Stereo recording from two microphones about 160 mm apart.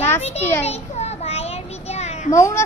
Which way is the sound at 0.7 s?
40° left (ahead or behind).